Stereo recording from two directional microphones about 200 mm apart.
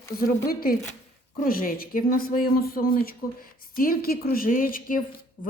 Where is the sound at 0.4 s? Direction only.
50° left (ahead or behind).